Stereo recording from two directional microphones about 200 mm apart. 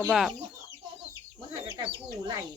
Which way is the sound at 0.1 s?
Centre (ahead or behind).